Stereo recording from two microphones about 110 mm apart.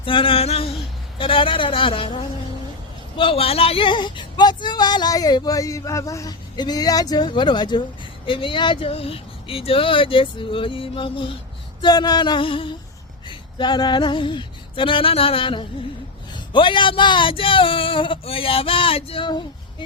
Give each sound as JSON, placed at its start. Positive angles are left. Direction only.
{"t": 0.0, "sound": "a sound", "side_deg": 50}
{"t": 1.2, "sound": "speech", "side_deg": 50}
{"t": 3.2, "sound": "speech", "side_deg": 55}
{"t": 11.8, "sound": "speech", "side_deg": 40}
{"t": 13.2, "sound": "female singing", "side_deg": 40}
{"t": 16.3, "sound": "speech", "side_deg": 50}